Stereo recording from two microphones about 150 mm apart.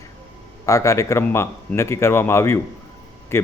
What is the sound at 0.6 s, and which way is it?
A man's voice, 20° left (ahead or behind).